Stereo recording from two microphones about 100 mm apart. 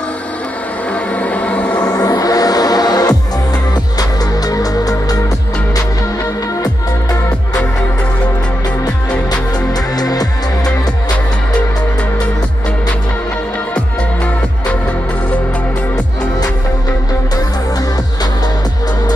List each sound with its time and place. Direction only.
1.1 s music: 15° left (ahead or behind)
1.8 s music: 40° left (ahead or behind)
4.5 s music: 40° left (ahead or behind)
9.9 s music: 40° left (ahead or behind)